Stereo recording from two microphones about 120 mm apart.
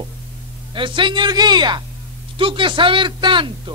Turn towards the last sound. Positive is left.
turn(degrees=-40)  # may be behind; listen again after turning